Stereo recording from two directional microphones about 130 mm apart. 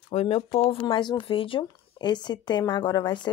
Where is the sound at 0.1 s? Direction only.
55° left (ahead or behind).